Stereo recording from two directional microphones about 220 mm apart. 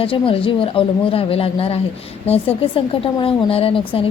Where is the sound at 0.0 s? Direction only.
25° left (ahead or behind).